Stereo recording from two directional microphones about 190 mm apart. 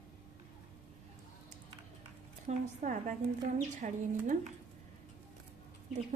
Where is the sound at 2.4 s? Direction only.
40° right (ahead or behind).